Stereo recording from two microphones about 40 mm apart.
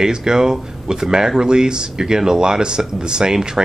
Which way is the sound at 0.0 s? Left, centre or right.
Centre.